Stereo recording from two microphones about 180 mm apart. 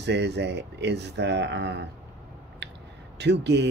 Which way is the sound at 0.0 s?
70° right (ahead or behind).